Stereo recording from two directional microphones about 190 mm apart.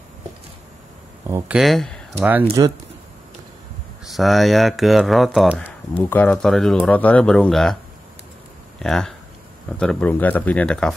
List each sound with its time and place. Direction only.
1.2 s speech: 10° right (ahead or behind)
1.6 s speech: centre (ahead or behind)
2.4 s speech: 20° right (ahead or behind)
4.0 s speech: centre (ahead or behind)
5.9 s speech: 10° left (ahead or behind)
8.8 s speech: 5° left (ahead or behind)